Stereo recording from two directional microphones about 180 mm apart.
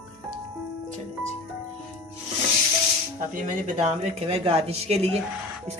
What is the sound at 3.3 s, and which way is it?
Speech, 40° right (ahead or behind).